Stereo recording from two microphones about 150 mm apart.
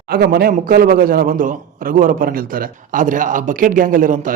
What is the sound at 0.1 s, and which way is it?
A man's voice, 90° right.